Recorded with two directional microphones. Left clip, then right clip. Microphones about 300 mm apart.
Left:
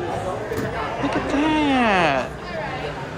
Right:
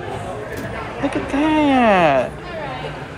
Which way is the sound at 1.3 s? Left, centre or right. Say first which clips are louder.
Right 4 dB; centre.